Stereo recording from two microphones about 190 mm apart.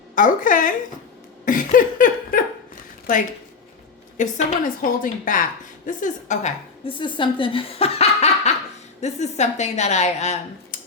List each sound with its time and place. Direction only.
0.2 s a woman's voice: 45° left (ahead or behind)
1.5 s a sound: 45° left (ahead or behind)
4.2 s a woman's voice: 45° left (ahead or behind)
7.0 s speech: 25° left (ahead or behind)